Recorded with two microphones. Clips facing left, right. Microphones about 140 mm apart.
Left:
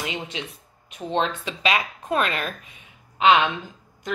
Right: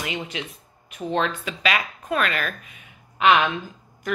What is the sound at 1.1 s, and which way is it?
A woman's voice, 25° left (ahead or behind).